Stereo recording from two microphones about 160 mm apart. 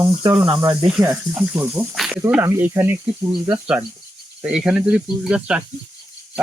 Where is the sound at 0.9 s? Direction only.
5° right (ahead or behind).